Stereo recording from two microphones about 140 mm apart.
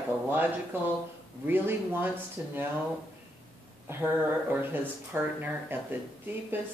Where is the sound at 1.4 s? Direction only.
15° right (ahead or behind).